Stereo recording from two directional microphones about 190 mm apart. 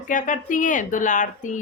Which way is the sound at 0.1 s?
45° left (ahead or behind).